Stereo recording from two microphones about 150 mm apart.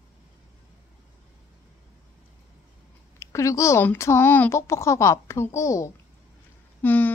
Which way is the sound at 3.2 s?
20° left (ahead or behind).